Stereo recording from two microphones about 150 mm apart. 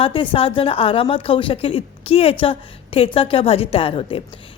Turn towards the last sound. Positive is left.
turn(degrees=40)  # may be behind; listen again after turning